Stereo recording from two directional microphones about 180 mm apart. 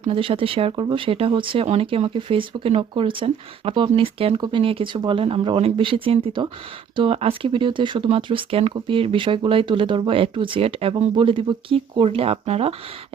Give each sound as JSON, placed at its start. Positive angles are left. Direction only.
{"t": 0.0, "sound": "speech", "side_deg": -30}